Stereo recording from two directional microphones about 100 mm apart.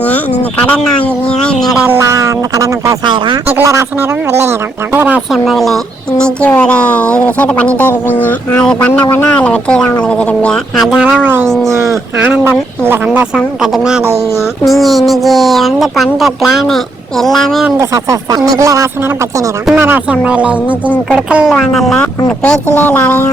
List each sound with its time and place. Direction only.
0.6 s speech: 15° left (ahead or behind)
1.9 s speech: 30° right (ahead or behind)
3.4 s speech: 20° right (ahead or behind)
5.3 s speech: centre (ahead or behind)
9.0 s speech: 20° left (ahead or behind)
10.8 s speech: 10° right (ahead or behind)
11.4 s speech: 5° left (ahead or behind)
11.7 s speech: 30° right (ahead or behind)
13.3 s speech: 5° right (ahead or behind)
17.7 s speech: 35° right (ahead or behind)
19.8 s speech: 15° right (ahead or behind)
21.7 s speech: centre (ahead or behind)
22.3 s speech: 10° left (ahead or behind)